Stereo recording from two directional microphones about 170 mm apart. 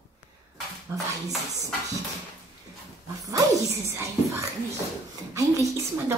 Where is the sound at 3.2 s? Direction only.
20° right (ahead or behind).